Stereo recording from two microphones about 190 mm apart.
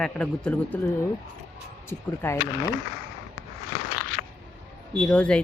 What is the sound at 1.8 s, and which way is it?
Speech, 10° left (ahead or behind).